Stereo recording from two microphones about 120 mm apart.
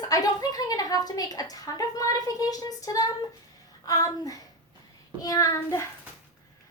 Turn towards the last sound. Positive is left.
turn(degrees=25)  # may be behind; listen again after turning